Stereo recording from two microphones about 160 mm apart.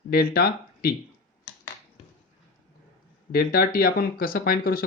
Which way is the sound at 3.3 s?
70° left (ahead or behind).